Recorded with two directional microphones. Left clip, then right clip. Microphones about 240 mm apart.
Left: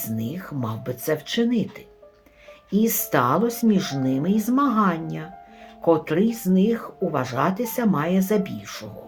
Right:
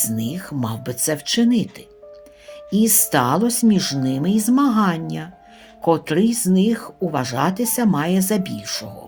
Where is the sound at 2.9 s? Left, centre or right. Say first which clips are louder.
Right 2 dB; right.